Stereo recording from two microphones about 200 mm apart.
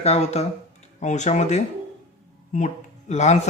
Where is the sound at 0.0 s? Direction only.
30° left (ahead or behind).